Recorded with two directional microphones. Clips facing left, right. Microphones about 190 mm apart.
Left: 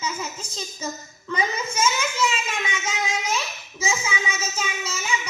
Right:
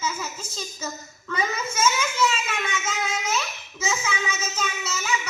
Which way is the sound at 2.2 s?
10° left (ahead or behind).